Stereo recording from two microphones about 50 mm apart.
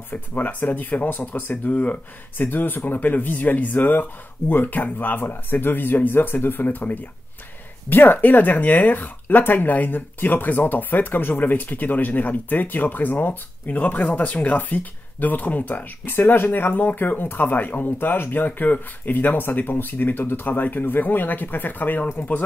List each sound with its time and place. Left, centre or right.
0.1 s speech: left